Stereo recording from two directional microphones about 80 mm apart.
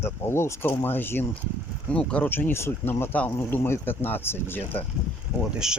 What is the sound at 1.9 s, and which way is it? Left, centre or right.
Speech, centre.